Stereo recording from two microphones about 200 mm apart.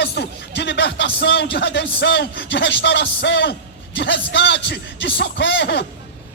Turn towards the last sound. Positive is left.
turn(degrees=60)  # may be behind; listen again after turning